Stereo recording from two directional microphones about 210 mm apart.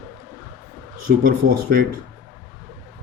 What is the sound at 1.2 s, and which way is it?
Speech, 45° right (ahead or behind).